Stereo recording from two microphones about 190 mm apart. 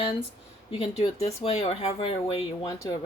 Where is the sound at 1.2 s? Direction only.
35° left (ahead or behind).